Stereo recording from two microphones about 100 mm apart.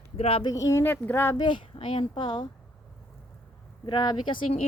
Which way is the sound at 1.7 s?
60° left (ahead or behind).